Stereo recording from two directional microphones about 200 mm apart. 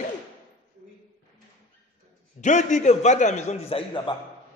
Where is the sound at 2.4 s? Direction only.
35° left (ahead or behind).